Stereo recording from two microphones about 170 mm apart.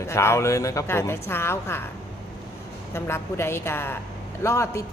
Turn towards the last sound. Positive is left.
turn(degrees=15)  # may be behind; listen again after turning